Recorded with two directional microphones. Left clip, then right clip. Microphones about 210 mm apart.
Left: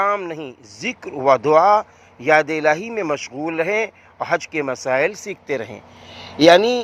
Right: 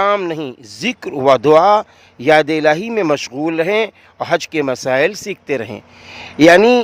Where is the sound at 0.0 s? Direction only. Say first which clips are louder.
Right 5 dB; 45° right (ahead or behind).